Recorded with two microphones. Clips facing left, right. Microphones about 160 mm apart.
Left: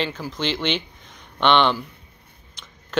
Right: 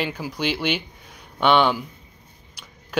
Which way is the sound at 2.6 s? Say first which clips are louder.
Even; 10° right (ahead or behind).